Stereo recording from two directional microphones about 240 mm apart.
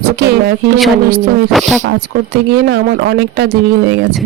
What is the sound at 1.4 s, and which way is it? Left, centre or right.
Speech, centre.